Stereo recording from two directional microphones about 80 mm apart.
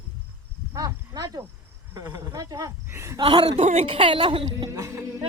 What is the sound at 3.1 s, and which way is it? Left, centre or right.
A woman's voice, right.